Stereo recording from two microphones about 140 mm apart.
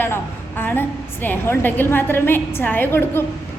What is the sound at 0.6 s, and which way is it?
A woman's voice, 15° left (ahead or behind).